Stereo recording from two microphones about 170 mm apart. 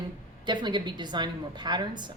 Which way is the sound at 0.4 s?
25° right (ahead or behind).